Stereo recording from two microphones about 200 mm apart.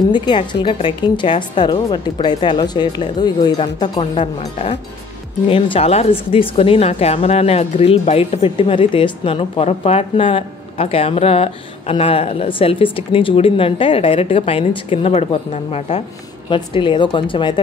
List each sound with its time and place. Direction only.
0.1 s a woman's voice: 20° left (ahead or behind)